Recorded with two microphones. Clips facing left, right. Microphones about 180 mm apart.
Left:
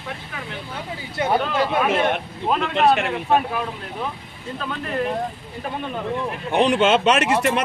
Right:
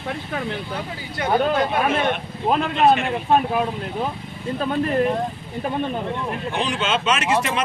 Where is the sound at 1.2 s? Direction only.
25° left (ahead or behind).